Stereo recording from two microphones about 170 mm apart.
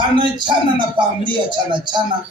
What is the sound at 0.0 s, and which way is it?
Speech, 25° right (ahead or behind).